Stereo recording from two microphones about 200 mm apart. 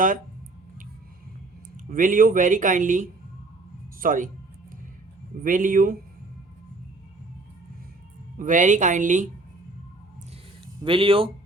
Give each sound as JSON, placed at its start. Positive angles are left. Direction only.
{"t": 1.7, "sound": "speech", "side_deg": -40}
{"t": 5.4, "sound": "speech", "side_deg": -40}
{"t": 8.4, "sound": "speech", "side_deg": -40}
{"t": 10.8, "sound": "speech", "side_deg": -25}